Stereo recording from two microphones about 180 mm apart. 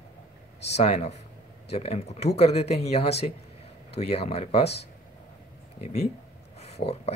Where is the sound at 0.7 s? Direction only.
35° left (ahead or behind).